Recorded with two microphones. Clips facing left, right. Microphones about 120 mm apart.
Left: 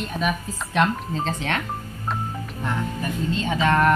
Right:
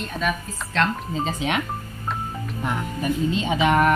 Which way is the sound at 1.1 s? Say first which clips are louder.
Right 5 dB; 10° right (ahead or behind).